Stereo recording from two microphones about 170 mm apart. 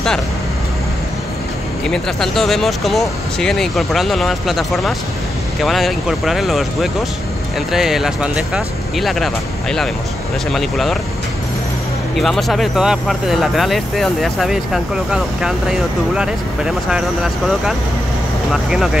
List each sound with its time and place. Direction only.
1.9 s speech: centre (ahead or behind)
12.2 s speech: centre (ahead or behind)